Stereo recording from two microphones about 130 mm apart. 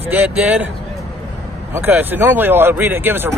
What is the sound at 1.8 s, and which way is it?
Speech, 15° right (ahead or behind).